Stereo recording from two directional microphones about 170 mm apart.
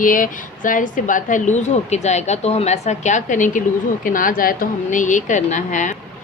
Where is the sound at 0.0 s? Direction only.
55° left (ahead or behind).